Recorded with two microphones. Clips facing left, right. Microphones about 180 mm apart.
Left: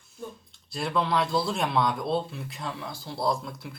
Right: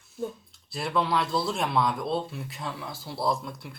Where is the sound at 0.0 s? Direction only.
Centre (ahead or behind).